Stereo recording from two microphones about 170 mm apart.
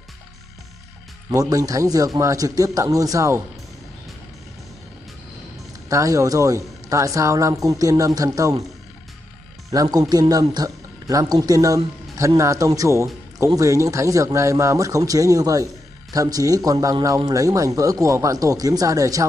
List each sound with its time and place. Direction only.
1.3 s speech: 20° right (ahead or behind)
5.9 s speech: 20° right (ahead or behind)
9.7 s speech: 20° right (ahead or behind)